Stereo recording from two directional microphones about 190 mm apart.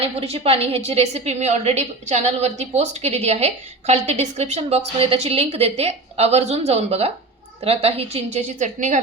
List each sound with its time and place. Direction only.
0.0 s a woman's voice: 30° right (ahead or behind)